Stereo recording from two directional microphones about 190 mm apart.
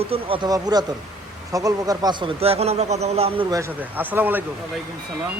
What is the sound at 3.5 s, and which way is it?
Speech, 10° right (ahead or behind).